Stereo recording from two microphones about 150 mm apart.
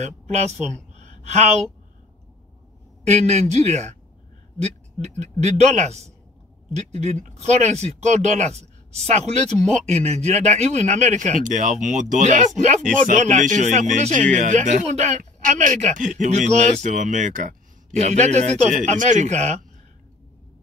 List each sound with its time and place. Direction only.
0.0 s speech: 45° right (ahead or behind)
0.9 s a sound: 50° right (ahead or behind)
3.0 s speech: 50° right (ahead or behind)